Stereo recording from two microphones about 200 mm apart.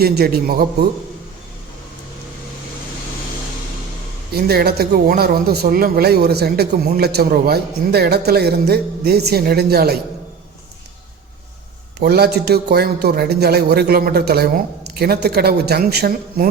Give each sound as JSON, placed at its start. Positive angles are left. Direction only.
{"t": 0.0, "sound": "a man's voice", "side_deg": -50}
{"t": 4.3, "sound": "a man's voice", "side_deg": -50}
{"t": 11.9, "sound": "a man's voice", "side_deg": -50}